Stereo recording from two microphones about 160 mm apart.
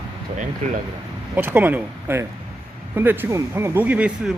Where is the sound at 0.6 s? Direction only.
50° right (ahead or behind).